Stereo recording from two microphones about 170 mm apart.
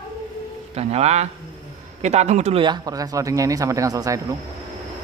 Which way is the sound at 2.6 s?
25° right (ahead or behind).